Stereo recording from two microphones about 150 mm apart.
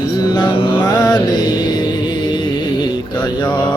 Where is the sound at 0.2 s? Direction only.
30° left (ahead or behind).